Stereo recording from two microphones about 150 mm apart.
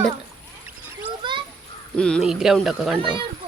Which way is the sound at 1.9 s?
5° left (ahead or behind).